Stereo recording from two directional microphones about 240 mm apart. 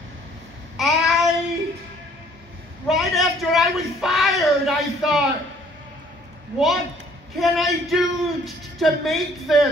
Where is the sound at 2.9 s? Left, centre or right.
Centre.